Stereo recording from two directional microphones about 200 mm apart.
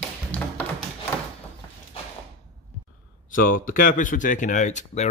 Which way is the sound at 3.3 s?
45° left (ahead or behind).